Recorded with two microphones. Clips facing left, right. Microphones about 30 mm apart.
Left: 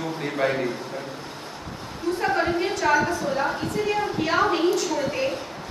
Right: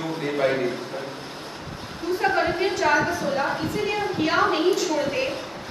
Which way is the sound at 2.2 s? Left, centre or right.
Centre.